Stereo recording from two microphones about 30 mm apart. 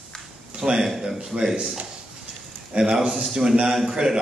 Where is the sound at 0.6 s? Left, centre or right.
Right.